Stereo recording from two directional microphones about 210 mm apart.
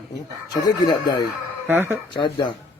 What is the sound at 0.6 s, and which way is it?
Speech, 20° left (ahead or behind).